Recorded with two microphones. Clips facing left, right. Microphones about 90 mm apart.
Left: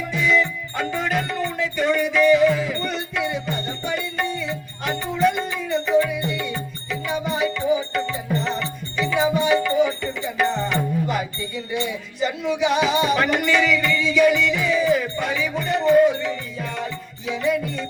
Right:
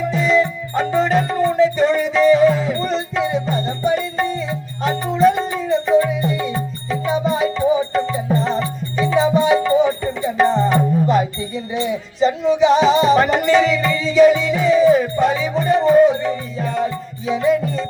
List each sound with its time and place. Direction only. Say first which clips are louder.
0.1 s music: right 3 dB; 35° right (ahead or behind)